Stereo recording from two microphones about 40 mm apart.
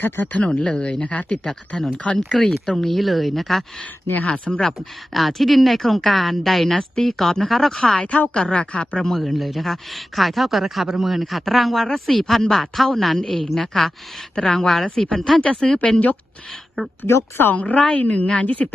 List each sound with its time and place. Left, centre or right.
0.3 s speech: left
2.4 s a woman's voice: centre
4.3 s a woman's voice: left
5.1 s a woman's voice: centre
7.9 s a woman's voice: left
8.4 s speech: left
9.0 s a woman's voice: centre
13.5 s a woman's voice: centre
14.3 s speech: centre
15.4 s speech: left
17.5 s a woman's voice: left